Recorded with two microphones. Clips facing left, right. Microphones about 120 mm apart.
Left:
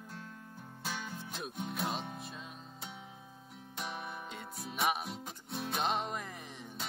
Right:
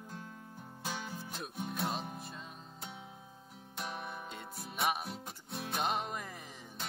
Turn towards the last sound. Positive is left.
turn(degrees=0)  # may be behind; listen again after turning